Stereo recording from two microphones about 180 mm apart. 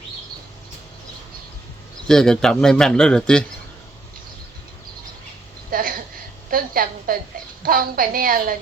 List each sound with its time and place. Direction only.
2.0 s speech: 5° left (ahead or behind)
5.7 s a sound: 50° right (ahead or behind)
7.6 s a woman's voice: 55° right (ahead or behind)